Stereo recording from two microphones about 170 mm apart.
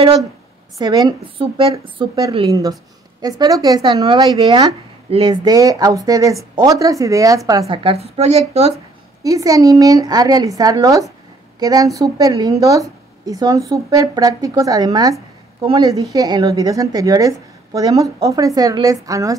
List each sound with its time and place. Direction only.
0.7 s a woman's voice: 25° right (ahead or behind)
7.6 s a woman's voice: 35° right (ahead or behind)
9.2 s a woman's voice: 20° right (ahead or behind)